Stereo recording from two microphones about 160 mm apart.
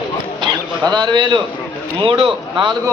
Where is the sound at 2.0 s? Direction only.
35° right (ahead or behind).